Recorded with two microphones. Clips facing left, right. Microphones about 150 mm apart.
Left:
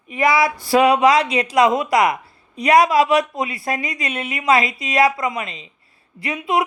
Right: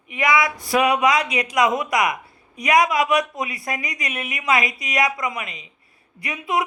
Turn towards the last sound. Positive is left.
turn(degrees=25)  # may be behind; listen again after turning